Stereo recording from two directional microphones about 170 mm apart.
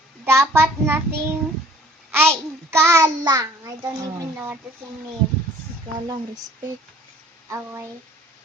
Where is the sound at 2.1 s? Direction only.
15° right (ahead or behind).